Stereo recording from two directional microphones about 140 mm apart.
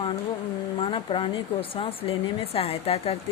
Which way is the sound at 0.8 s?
40° left (ahead or behind).